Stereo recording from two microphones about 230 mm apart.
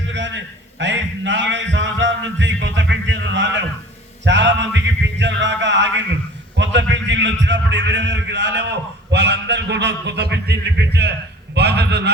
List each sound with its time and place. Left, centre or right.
0.1 s a sound: right
4.3 s music: right
6.6 s a man's voice: right